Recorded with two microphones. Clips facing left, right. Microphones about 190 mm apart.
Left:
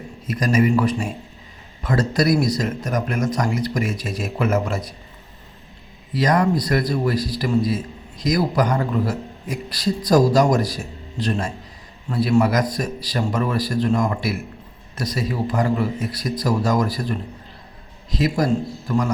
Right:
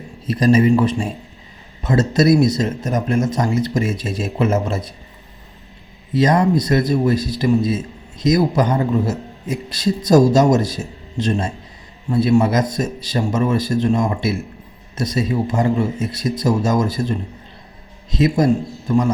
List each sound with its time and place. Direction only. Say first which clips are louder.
0.3 s speech: right 5 dB; 30° right (ahead or behind)
6.1 s speech: right 3 dB; 25° right (ahead or behind)